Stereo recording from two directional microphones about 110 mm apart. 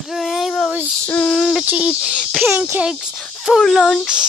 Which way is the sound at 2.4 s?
20° right (ahead or behind).